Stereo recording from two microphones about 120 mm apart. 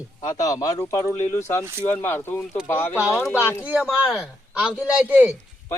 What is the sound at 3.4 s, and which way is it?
Speech, 20° left (ahead or behind).